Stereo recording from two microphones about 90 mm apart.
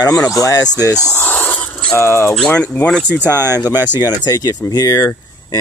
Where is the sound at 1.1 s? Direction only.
20° left (ahead or behind).